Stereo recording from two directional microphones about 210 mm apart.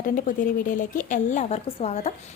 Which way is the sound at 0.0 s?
40° left (ahead or behind).